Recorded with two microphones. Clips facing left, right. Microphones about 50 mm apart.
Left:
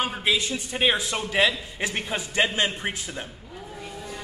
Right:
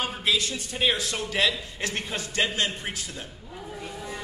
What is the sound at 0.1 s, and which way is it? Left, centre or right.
A man's voice, left.